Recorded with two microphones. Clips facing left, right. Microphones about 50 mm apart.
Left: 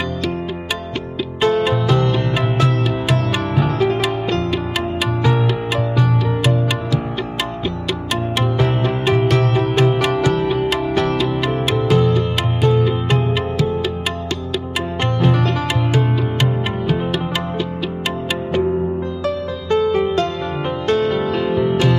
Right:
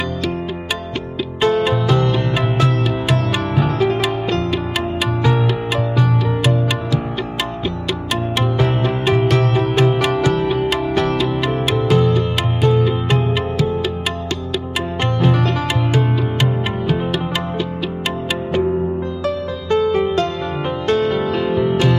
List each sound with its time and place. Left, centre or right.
1.4 s music: right